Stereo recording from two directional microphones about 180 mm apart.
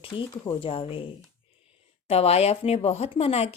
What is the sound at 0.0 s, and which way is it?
Speech, 30° left (ahead or behind).